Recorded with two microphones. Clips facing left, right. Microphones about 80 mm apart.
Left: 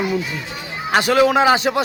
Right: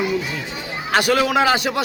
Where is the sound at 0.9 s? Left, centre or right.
Left.